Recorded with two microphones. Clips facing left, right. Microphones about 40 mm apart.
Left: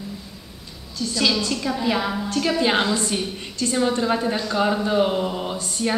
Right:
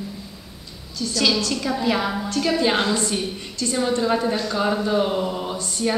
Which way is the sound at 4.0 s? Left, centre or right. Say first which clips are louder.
Right 1 dB; centre.